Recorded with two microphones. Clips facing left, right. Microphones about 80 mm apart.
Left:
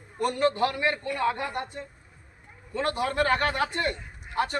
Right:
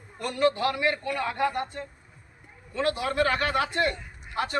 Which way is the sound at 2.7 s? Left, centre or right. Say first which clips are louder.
Even; left.